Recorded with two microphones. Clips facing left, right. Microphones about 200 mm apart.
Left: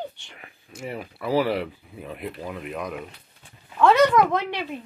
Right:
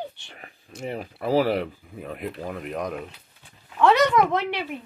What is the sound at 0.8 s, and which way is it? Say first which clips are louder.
Speech: right 2 dB; 40° right (ahead or behind).